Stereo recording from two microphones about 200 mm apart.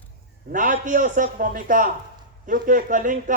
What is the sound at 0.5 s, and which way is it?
A man's voice, 40° right (ahead or behind).